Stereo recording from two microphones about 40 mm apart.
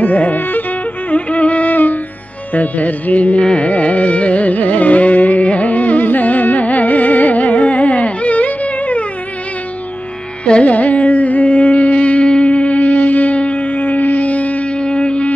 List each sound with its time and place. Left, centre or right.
0.0 s music: left
1.1 s music: left
3.4 s carnatic music: left
10.4 s music: left
10.7 s music: left
14.8 s music: left